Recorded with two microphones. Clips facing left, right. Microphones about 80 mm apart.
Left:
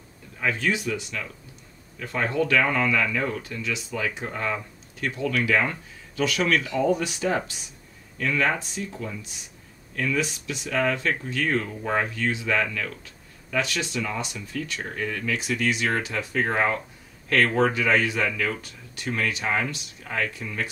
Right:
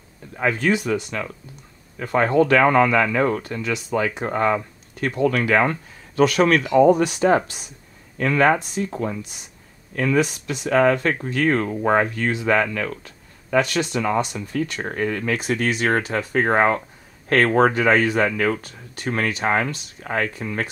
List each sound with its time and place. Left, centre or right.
0.4 s speech: right